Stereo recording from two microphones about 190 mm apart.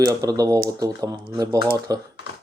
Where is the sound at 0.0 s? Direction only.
20° right (ahead or behind).